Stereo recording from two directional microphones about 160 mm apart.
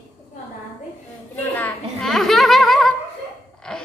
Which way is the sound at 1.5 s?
5° left (ahead or behind).